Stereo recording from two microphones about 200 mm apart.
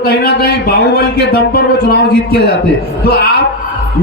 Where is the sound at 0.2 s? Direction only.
50° left (ahead or behind).